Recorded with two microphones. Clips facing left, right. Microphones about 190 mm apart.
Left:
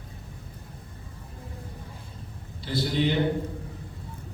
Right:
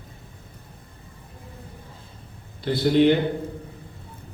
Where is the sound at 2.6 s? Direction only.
55° right (ahead or behind).